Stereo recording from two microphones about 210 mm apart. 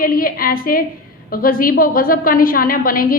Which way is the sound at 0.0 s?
45° left (ahead or behind).